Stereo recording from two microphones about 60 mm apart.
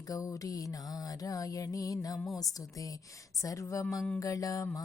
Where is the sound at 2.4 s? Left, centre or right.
Left.